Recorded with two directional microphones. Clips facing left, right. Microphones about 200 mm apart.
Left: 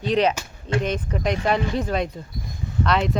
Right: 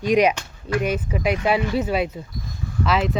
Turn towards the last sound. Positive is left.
turn(degrees=-5)  # may be behind; listen again after turning